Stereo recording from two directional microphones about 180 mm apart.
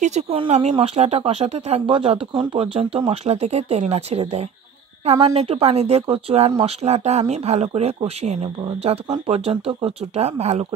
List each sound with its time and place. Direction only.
0.0 s speech: 40° right (ahead or behind)